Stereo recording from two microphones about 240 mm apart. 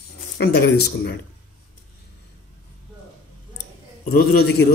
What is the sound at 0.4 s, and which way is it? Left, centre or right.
Speech, left.